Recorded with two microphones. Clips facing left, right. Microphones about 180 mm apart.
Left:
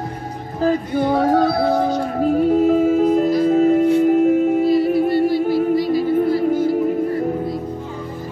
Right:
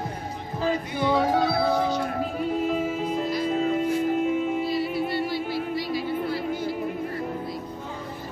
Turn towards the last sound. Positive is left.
turn(degrees=45)  # may be behind; listen again after turning